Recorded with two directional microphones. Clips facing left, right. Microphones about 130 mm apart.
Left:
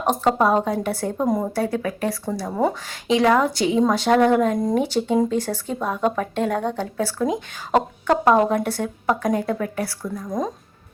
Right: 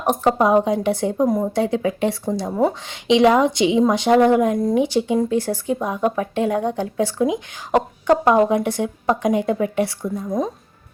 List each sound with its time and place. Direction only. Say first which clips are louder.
0.0 s a woman's voice: right 2 dB; 15° right (ahead or behind)
4.5 s speech: right 2 dB; centre (ahead or behind)
4.8 s speech: right 1 dB; 10° right (ahead or behind)
10.2 s speech: right 2 dB; 5° right (ahead or behind)